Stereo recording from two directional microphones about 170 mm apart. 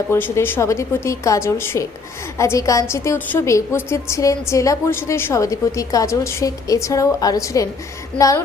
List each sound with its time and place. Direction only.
0.1 s a woman's voice: 15° left (ahead or behind)